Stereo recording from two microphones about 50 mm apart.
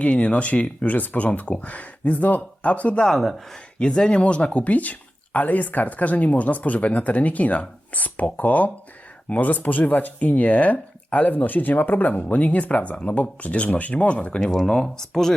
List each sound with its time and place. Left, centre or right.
0.2 s speech: left
3.1 s speech: centre
3.8 s speech: centre
14.4 s speech: centre